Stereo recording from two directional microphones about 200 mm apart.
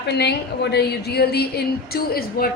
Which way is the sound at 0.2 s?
55° left (ahead or behind).